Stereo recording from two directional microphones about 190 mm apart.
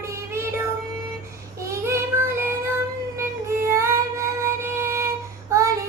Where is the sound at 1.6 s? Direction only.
15° right (ahead or behind).